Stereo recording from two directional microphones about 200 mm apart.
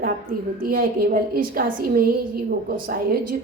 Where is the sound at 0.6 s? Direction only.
45° right (ahead or behind).